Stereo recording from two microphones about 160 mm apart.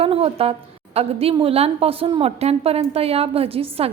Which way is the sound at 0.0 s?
35° right (ahead or behind).